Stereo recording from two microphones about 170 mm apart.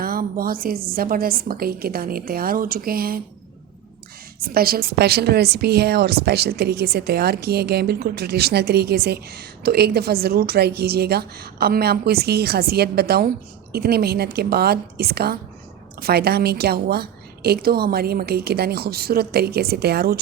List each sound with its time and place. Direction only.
0.0 s a woman's voice: 60° right (ahead or behind)
4.4 s a woman's voice: 60° right (ahead or behind)